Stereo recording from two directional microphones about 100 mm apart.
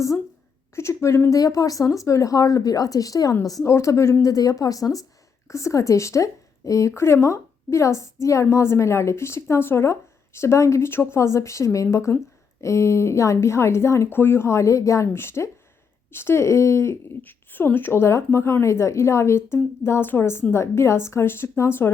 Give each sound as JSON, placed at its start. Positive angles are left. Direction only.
{"t": 0.8, "sound": "a woman's voice", "side_deg": 30}